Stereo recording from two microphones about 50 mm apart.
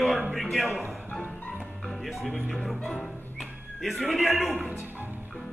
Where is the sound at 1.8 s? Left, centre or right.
Centre.